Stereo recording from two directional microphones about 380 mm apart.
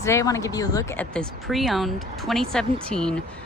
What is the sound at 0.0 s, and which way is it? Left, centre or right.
A woman's voice, centre.